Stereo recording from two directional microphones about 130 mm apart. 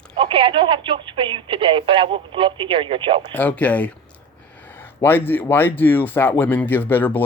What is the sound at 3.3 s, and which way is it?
Speech, 10° left (ahead or behind).